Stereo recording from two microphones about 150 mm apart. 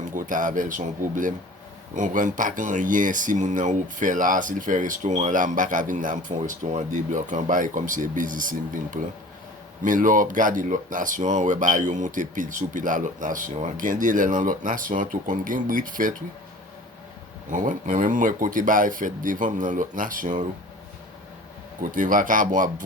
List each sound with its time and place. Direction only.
0.2 s speech: 60° right (ahead or behind)
17.5 s speech: 60° right (ahead or behind)
21.9 s speech: 60° right (ahead or behind)